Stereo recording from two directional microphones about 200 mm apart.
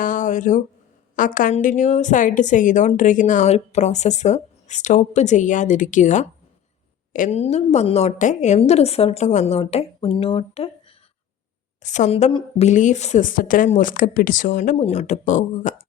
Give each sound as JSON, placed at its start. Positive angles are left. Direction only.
{"t": 0.0, "sound": "a woman's voice", "side_deg": 40}
{"t": 11.8, "sound": "a woman's voice", "side_deg": 35}